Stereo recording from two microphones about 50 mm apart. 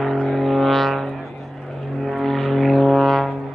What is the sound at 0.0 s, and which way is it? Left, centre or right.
Vehicle, centre.